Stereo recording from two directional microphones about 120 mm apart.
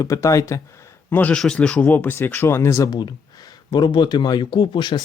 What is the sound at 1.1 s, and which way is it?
Speech, 15° left (ahead or behind).